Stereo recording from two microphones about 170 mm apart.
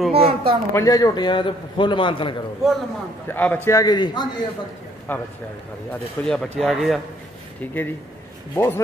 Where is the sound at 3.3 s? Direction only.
10° left (ahead or behind).